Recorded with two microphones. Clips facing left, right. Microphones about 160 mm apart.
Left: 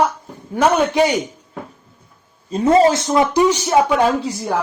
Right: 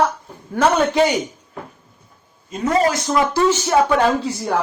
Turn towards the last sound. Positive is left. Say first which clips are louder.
# left 1 dB
turn(degrees=15)  # may be behind; listen again after turning